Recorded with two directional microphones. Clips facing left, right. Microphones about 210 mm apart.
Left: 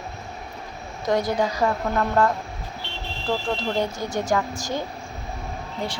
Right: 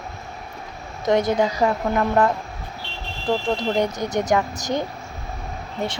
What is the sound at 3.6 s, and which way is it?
Speech, 20° right (ahead or behind).